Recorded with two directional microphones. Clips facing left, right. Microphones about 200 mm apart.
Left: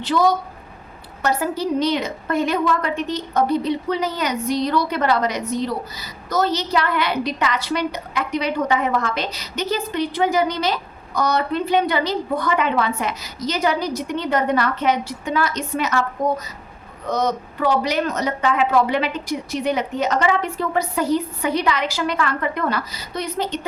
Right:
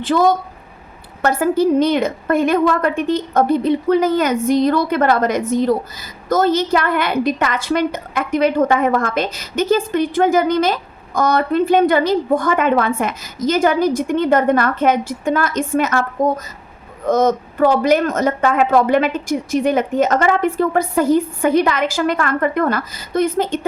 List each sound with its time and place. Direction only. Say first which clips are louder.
0.0 s a woman's voice: right 3 dB; 50° right (ahead or behind)
17.1 s a woman's voice: right 7 dB; 50° right (ahead or behind)